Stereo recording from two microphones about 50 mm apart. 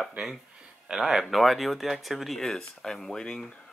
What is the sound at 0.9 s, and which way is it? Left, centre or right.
Speech, centre.